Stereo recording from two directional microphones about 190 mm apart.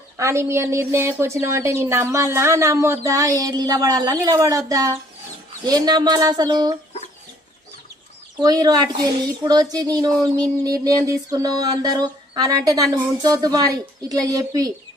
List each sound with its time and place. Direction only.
0.2 s a woman's voice: 15° right (ahead or behind)
8.4 s speech: 20° right (ahead or behind)